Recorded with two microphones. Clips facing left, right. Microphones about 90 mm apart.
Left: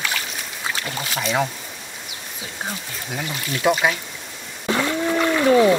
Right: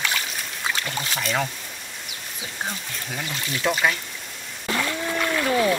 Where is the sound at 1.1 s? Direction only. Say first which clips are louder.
Left 4 dB; 5° left (ahead or behind).